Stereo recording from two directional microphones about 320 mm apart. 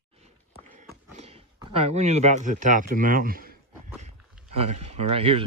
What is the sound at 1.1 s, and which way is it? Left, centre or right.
Speech, centre.